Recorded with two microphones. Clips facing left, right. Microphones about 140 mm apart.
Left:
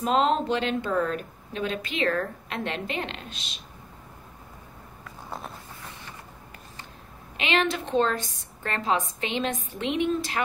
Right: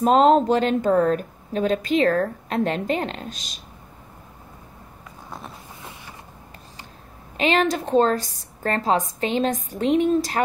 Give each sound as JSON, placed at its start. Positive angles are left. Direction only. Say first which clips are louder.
{"t": 0.0, "sound": "speech", "louder": "right 8 dB", "side_deg": -40}
{"t": 7.3, "sound": "speech", "louder": "right 5 dB", "side_deg": -40}